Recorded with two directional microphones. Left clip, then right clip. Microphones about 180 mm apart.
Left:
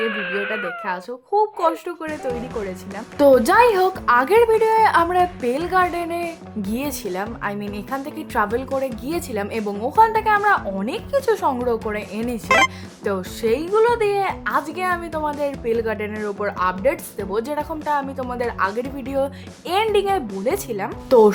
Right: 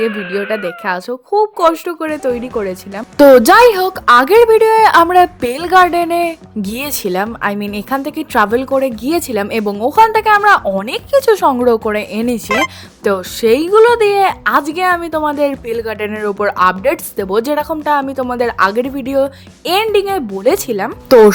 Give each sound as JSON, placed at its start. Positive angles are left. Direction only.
{"t": 0.1, "sound": "speech", "side_deg": 0}
{"t": 0.9, "sound": "a woman's voice", "side_deg": -35}
{"t": 12.5, "sound": "speech", "side_deg": 0}
{"t": 13.1, "sound": "a woman's voice", "side_deg": -40}
{"t": 20.4, "sound": "a woman's voice", "side_deg": -35}